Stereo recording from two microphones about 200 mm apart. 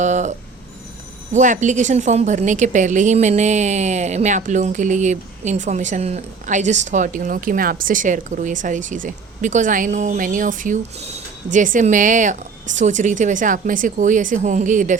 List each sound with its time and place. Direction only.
0.0 s speech: 35° right (ahead or behind)